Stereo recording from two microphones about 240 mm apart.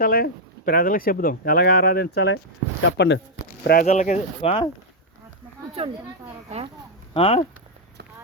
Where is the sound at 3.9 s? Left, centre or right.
Left.